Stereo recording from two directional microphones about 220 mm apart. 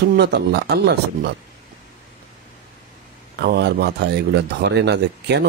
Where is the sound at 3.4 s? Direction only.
50° right (ahead or behind).